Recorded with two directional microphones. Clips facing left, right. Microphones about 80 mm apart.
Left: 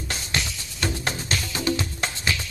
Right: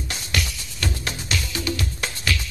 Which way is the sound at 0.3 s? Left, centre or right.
Left.